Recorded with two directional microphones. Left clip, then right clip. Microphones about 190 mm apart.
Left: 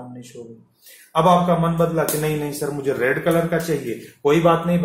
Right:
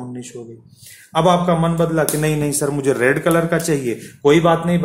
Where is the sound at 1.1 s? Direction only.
45° right (ahead or behind).